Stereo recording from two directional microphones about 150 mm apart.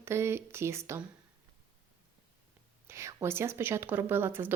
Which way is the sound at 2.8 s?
20° right (ahead or behind).